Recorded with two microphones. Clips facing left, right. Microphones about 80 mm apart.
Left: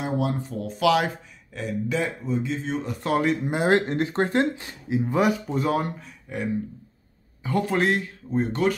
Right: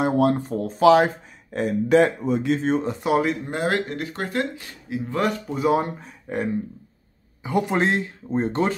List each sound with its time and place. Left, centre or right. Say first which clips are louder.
0.0 s speech: right 7 dB; right
1.6 s speech: right 9 dB; right
3.0 s speech: left 2 dB; centre
3.4 s speech: left 3 dB; centre
5.5 s speech: right 3 dB; centre
5.9 s speech: right 4 dB; right
7.4 s speech: right 1 dB; centre